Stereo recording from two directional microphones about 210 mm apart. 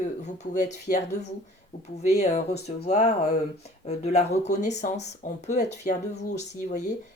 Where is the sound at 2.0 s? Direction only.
35° left (ahead or behind).